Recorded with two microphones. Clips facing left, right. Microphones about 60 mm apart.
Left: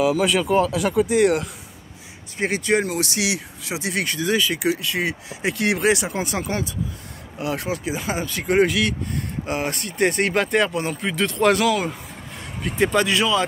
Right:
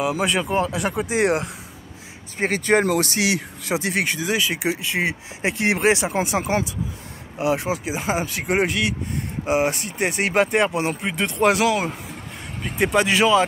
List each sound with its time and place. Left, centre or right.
0.1 s speech: centre
2.3 s speech: right
4.2 s speech: centre
4.6 s speech: right
10.6 s speech: right
12.9 s speech: right